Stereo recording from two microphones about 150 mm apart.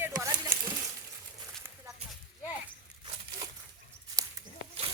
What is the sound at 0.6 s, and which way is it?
Stir, 25° right (ahead or behind).